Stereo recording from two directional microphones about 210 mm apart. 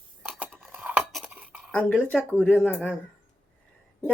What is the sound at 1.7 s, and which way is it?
Speech, 10° left (ahead or behind).